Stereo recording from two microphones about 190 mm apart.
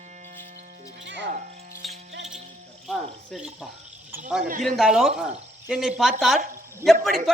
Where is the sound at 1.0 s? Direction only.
70° right (ahead or behind).